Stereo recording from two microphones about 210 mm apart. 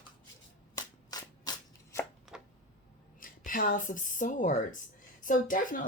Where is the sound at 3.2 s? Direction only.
40° left (ahead or behind).